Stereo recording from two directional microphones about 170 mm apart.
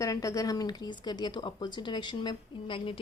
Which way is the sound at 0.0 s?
20° left (ahead or behind).